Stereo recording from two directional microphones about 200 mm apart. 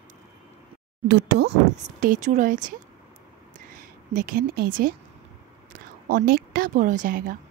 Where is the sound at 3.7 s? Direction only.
45° right (ahead or behind).